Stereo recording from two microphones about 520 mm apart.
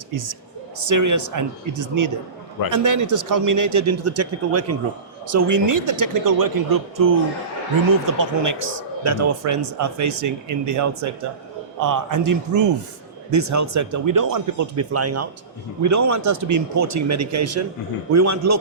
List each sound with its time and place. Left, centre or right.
0.8 s a man's voice: right